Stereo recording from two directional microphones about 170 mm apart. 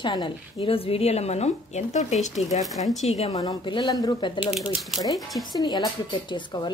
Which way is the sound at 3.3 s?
25° left (ahead or behind).